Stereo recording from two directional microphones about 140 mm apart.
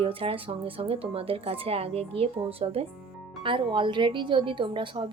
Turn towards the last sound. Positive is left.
turn(degrees=-35)  # may be behind; listen again after turning